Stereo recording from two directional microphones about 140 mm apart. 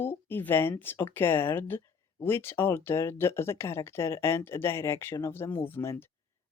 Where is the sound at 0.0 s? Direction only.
15° left (ahead or behind).